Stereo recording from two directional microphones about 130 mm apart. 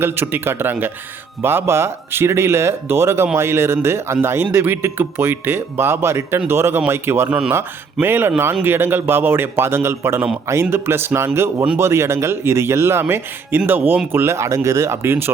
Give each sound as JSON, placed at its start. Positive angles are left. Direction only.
{"t": 0.0, "sound": "speech", "side_deg": -20}